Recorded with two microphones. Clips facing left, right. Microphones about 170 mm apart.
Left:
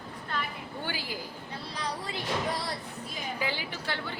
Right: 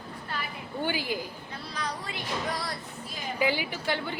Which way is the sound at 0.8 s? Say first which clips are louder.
Right 7 dB; 15° right (ahead or behind).